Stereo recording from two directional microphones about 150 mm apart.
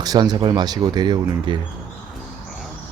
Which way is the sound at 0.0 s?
25° right (ahead or behind).